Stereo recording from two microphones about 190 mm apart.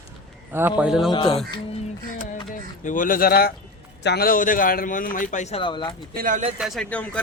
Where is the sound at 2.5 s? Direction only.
45° left (ahead or behind).